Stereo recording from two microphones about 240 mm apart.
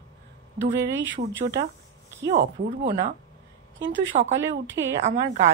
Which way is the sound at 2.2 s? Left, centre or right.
Right.